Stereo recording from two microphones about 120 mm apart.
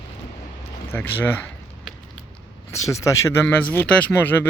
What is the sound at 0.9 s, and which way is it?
Speech, 15° left (ahead or behind).